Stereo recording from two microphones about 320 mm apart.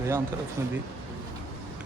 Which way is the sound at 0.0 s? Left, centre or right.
Centre.